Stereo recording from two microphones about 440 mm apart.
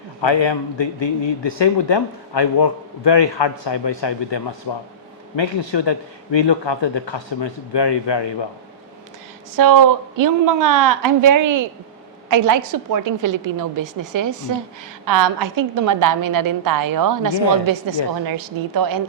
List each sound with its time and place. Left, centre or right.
0.2 s a man's voice: left
9.6 s a woman's voice: right